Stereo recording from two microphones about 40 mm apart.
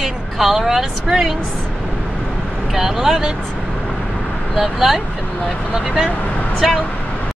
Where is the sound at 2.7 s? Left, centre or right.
Centre.